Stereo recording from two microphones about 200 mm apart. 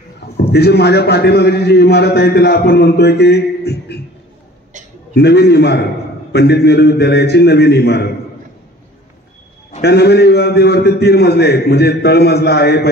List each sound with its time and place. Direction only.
0.5 s a man's voice: 55° left (ahead or behind)
5.1 s a man's voice: 55° left (ahead or behind)
9.8 s a man's voice: 55° left (ahead or behind)